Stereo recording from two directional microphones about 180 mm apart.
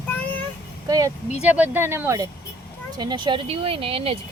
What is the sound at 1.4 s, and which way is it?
Speech, 10° right (ahead or behind).